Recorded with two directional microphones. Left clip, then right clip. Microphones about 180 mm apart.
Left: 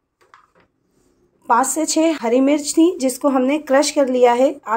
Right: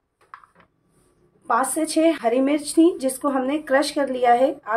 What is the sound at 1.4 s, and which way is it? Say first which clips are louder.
A woman's voice: left 5 dB; 35° left (ahead or behind).